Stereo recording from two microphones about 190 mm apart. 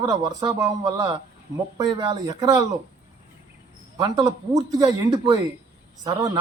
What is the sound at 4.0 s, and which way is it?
A man's voice, 20° right (ahead or behind).